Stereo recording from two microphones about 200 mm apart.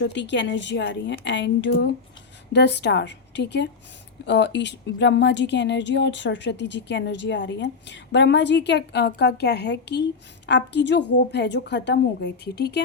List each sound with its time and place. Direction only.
0.0 s speech: 60° left (ahead or behind)